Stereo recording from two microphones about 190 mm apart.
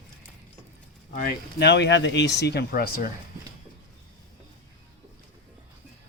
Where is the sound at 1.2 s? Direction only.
55° left (ahead or behind).